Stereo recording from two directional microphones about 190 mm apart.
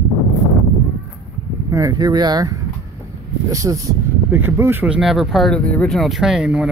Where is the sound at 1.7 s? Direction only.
20° right (ahead or behind).